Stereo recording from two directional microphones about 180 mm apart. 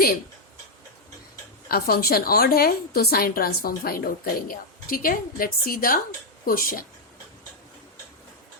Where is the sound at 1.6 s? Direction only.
55° left (ahead or behind).